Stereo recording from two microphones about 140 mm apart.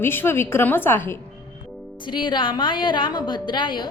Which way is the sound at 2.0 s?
35° left (ahead or behind).